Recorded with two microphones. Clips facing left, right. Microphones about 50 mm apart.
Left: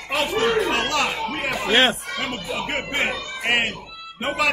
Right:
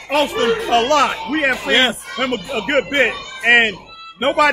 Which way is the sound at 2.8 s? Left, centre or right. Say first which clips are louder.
Right 7 dB; right.